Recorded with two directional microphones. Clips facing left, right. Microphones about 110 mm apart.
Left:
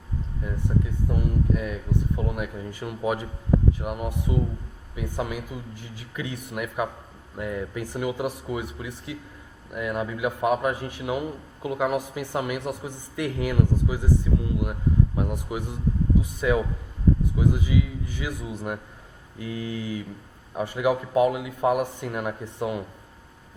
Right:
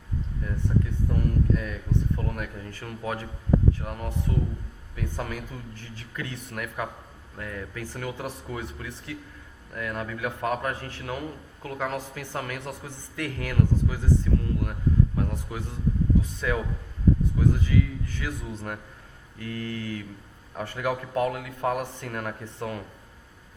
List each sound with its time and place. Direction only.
0.4 s a man's voice: 10° left (ahead or behind)